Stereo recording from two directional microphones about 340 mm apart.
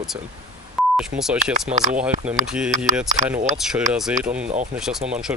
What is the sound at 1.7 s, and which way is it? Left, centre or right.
Speech, centre.